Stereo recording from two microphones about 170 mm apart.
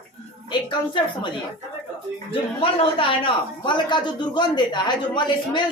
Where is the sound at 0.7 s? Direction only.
25° left (ahead or behind).